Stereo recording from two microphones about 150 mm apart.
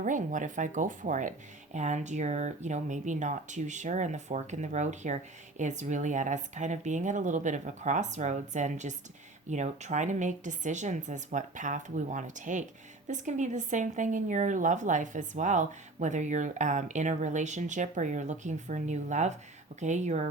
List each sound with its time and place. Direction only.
0.0 s speech: 60° right (ahead or behind)